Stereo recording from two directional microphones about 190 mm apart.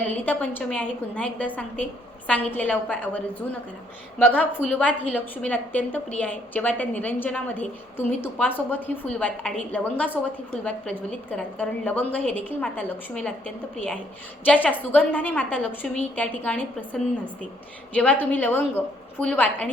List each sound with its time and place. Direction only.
0.1 s a woman's voice: 10° left (ahead or behind)
4.4 s a woman's voice: 10° left (ahead or behind)